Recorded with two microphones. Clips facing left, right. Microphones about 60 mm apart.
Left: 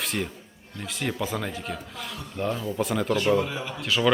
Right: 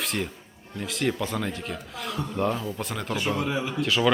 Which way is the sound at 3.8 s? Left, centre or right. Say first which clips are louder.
Even; centre.